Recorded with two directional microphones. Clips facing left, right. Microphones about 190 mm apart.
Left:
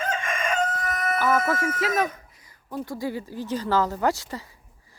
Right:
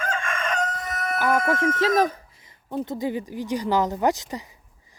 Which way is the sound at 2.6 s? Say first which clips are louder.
Right 3 dB; 25° right (ahead or behind).